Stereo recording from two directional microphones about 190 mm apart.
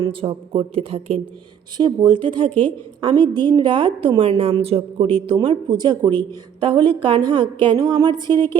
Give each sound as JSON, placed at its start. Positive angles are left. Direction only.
{"t": 0.0, "sound": "a woman's voice", "side_deg": -30}